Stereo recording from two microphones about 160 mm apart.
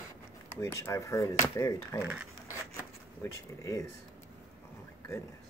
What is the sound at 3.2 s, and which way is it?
Speech, 20° left (ahead or behind).